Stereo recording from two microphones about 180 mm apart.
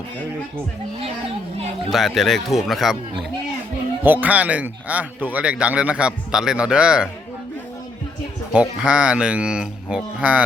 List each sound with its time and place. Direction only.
1.9 s speech: centre (ahead or behind)
8.5 s speech: 5° right (ahead or behind)